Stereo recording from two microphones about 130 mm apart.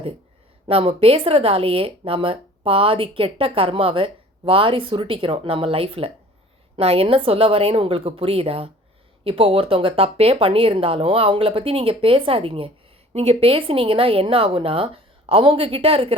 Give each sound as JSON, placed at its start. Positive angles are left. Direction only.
{"t": 0.7, "sound": "speech", "side_deg": -50}